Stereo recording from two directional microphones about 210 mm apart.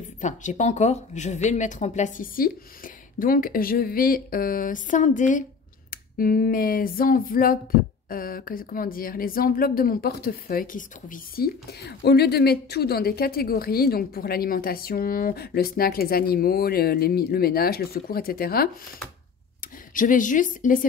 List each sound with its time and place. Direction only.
0.2 s speech: 35° left (ahead or behind)
3.2 s a sound: 40° left (ahead or behind)
19.9 s speech: 40° left (ahead or behind)